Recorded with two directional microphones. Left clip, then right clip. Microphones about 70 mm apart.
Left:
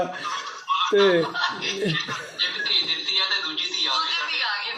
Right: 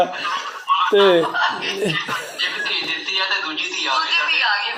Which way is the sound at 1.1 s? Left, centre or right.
Right.